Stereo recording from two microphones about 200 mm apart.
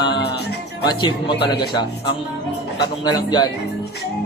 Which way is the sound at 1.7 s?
25° left (ahead or behind).